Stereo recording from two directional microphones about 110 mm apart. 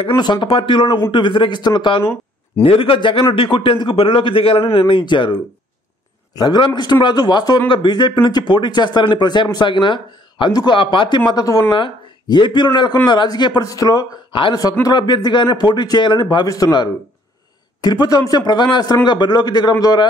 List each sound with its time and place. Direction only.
0.2 s a man's voice: 45° left (ahead or behind)
6.3 s a man's voice: 40° left (ahead or behind)
11.7 s speech: 45° left (ahead or behind)
18.3 s speech: 40° left (ahead or behind)